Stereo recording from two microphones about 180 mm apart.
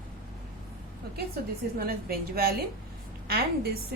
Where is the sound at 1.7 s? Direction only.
55° right (ahead or behind).